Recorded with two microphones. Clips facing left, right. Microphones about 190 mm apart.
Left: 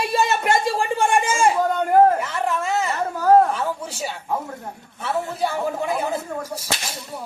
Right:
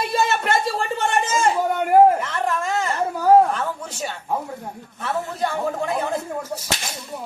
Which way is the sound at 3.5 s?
5° left (ahead or behind).